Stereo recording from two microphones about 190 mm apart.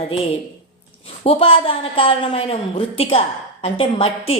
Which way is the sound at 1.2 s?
30° left (ahead or behind).